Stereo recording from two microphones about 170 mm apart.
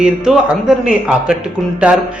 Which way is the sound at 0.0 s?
5° right (ahead or behind).